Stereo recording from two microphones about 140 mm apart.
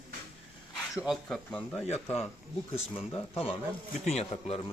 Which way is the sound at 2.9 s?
45° left (ahead or behind).